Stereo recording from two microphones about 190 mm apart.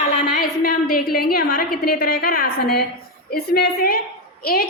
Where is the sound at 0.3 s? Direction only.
50° left (ahead or behind).